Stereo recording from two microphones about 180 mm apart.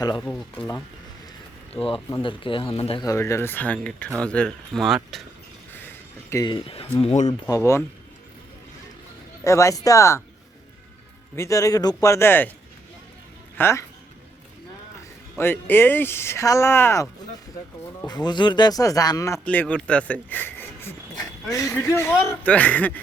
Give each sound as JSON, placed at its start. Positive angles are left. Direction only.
{"t": 0.0, "sound": "speech", "side_deg": 20}
{"t": 0.3, "sound": "speech", "side_deg": 10}
{"t": 1.7, "sound": "speech", "side_deg": 5}
{"t": 2.2, "sound": "speech", "side_deg": 30}
{"t": 3.0, "sound": "speech", "side_deg": 15}
{"t": 5.7, "sound": "a sound", "side_deg": 10}
{"t": 6.4, "sound": "speech", "side_deg": 30}
{"t": 7.0, "sound": "speech", "side_deg": 40}
{"t": 7.3, "sound": "speech", "side_deg": 15}
{"t": 9.4, "sound": "speech", "side_deg": 15}
{"t": 11.3, "sound": "speech", "side_deg": 15}
{"t": 13.6, "sound": "speech", "side_deg": 15}
{"t": 15.4, "sound": "speech", "side_deg": 10}
{"t": 21.5, "sound": "speech", "side_deg": 20}